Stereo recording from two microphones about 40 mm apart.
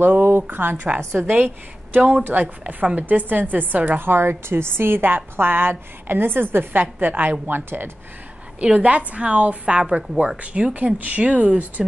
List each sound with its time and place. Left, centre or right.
0.0 s a woman's voice: right
1.3 s a woman's voice: right
2.3 s a woman's voice: right
3.0 s a woman's voice: right
4.0 s a woman's voice: right
8.7 s a woman's voice: right
9.8 s a woman's voice: right